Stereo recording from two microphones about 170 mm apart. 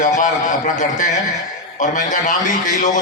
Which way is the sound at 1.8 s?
50° left (ahead or behind).